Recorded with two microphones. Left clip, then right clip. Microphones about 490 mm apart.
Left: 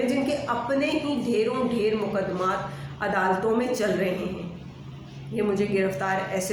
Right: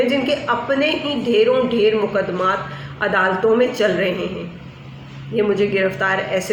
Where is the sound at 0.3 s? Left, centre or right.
Left.